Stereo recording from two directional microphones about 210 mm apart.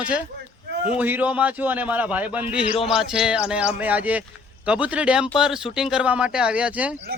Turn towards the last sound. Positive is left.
turn(degrees=-5)  # may be behind; listen again after turning